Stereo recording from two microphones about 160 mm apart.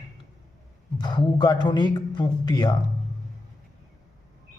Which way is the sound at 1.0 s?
30° left (ahead or behind).